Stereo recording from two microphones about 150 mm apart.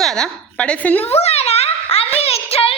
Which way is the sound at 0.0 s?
5° left (ahead or behind).